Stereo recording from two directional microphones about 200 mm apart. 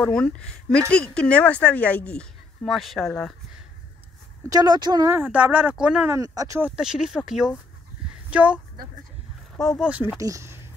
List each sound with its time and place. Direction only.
0.0 s speech: 5° left (ahead or behind)
4.5 s speech: 20° right (ahead or behind); by 6.1 s 5° right (ahead or behind)
6.1 s speech: 15° right (ahead or behind)
6.7 s a woman's voice: 5° right (ahead or behind)
9.6 s speech: centre (ahead or behind)
10.1 s speech: 15° right (ahead or behind)